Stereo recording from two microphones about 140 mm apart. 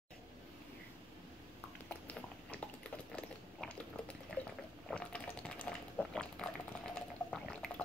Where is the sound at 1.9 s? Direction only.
10° left (ahead or behind).